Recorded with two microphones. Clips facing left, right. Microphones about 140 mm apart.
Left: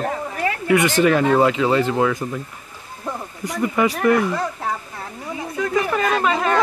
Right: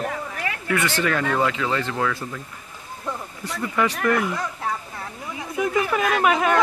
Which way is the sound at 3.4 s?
15° left (ahead or behind).